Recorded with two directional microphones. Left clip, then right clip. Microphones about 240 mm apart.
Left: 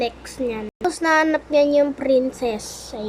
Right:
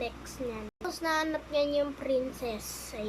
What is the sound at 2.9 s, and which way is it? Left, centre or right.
Speech, centre.